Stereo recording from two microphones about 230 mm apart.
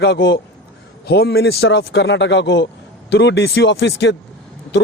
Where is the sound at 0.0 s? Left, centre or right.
Left.